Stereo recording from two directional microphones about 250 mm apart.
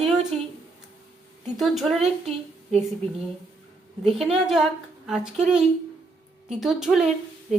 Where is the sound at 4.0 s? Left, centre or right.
Centre.